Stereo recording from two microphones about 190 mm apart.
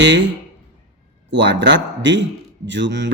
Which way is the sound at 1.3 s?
70° right (ahead or behind).